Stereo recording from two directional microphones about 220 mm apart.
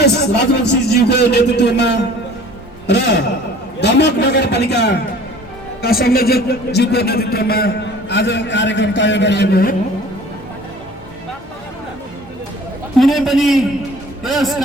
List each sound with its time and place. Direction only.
0.0 s a man's voice: 50° left (ahead or behind)
13.0 s a man's voice: centre (ahead or behind)